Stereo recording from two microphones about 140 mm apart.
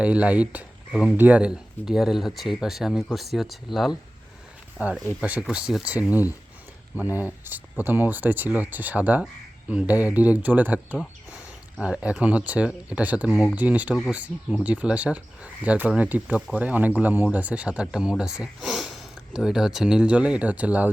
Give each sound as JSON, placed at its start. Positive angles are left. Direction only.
{"t": 0.0, "sound": "speech", "side_deg": -10}
{"t": 4.8, "sound": "speech", "side_deg": -10}
{"t": 11.8, "sound": "speech", "side_deg": -5}